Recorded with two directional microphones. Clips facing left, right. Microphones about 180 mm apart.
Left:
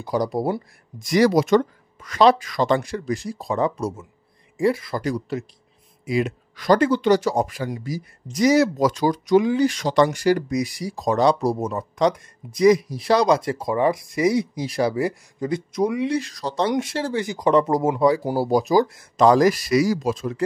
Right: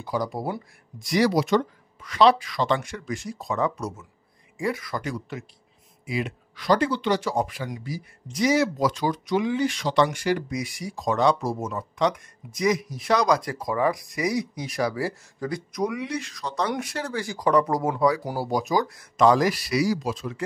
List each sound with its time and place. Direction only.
0.0 s speech: 40° left (ahead or behind)
19.2 s speech: 40° left (ahead or behind)